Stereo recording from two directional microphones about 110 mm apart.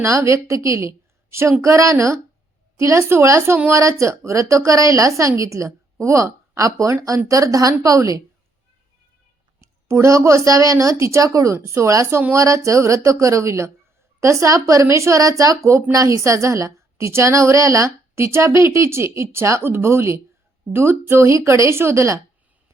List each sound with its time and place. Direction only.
0.0 s a woman's voice: 25° right (ahead or behind)
9.6 s a woman's voice: 30° right (ahead or behind)